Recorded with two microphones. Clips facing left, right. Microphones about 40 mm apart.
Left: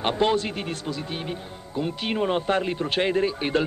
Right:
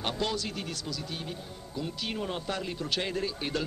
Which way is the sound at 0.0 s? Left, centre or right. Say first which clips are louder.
Left 9 dB; left.